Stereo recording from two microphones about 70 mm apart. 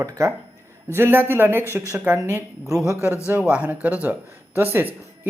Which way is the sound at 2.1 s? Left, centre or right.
Centre.